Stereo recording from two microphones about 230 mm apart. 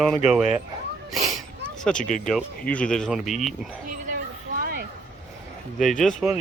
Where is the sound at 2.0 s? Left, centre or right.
Left.